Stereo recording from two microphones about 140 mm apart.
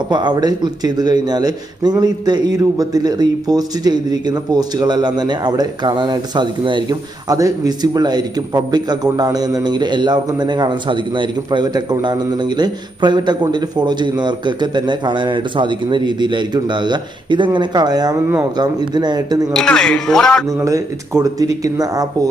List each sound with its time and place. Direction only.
0.1 s a man's voice: 30° right (ahead or behind)
19.5 s speech: 5° left (ahead or behind)
20.6 s speech: 20° right (ahead or behind)